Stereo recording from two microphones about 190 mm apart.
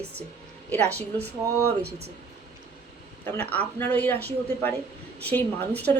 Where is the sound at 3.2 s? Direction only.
10° left (ahead or behind).